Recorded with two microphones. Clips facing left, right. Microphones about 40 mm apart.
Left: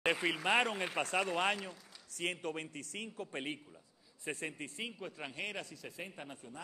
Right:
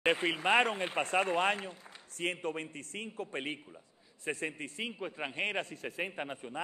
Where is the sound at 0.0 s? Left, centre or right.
Right.